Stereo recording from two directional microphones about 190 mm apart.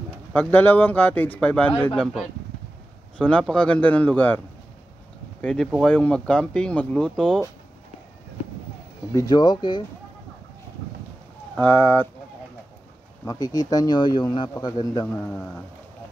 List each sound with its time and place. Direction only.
0.3 s speech: 10° left (ahead or behind)
5.4 s speech: 5° left (ahead or behind)
9.1 s speech: 20° left (ahead or behind)
11.5 s speech: 10° left (ahead or behind)
13.2 s speech: 20° left (ahead or behind)